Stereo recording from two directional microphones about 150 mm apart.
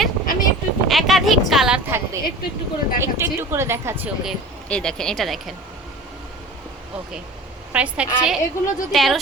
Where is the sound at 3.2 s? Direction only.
15° right (ahead or behind).